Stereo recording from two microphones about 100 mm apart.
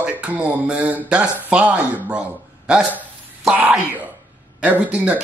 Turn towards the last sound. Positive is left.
turn(degrees=-15)  # may be behind; listen again after turning